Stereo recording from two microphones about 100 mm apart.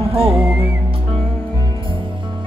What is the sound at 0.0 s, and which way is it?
Music, 75° right (ahead or behind).